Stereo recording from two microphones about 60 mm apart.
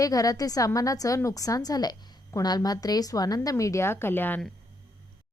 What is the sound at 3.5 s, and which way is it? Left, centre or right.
Speech, left.